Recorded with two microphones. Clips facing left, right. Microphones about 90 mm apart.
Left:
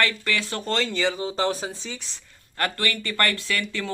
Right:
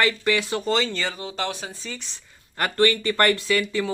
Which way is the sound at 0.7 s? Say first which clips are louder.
Right 2 dB; 5° right (ahead or behind).